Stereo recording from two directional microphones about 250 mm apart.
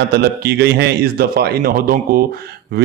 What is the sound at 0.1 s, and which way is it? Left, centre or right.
A man's voice, right.